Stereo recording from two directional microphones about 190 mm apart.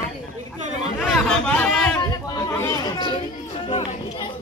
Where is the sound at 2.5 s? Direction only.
15° left (ahead or behind).